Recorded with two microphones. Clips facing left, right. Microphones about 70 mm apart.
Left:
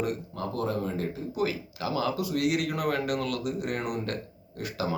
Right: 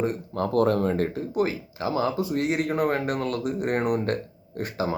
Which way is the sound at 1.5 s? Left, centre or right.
Right.